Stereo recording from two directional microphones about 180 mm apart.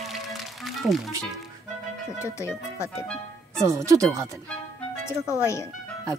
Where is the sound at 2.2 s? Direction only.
15° left (ahead or behind).